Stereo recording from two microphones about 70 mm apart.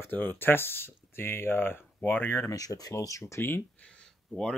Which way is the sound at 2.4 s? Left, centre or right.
Left.